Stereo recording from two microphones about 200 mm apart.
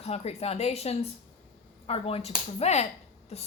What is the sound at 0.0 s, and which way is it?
A woman's voice, 30° left (ahead or behind).